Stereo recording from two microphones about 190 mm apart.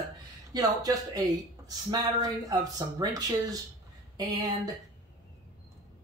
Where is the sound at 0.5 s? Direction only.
20° right (ahead or behind).